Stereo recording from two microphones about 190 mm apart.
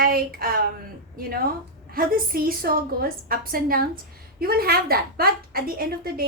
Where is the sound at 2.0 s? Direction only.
50° right (ahead or behind).